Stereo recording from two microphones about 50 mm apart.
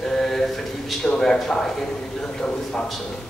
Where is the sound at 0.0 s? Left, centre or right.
Centre.